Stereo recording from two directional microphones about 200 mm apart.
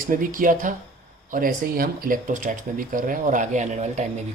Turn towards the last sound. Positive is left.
turn(degrees=-35)  # may be behind; listen again after turning